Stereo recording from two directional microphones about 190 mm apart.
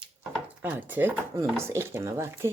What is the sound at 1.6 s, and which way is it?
Speech, 15° right (ahead or behind).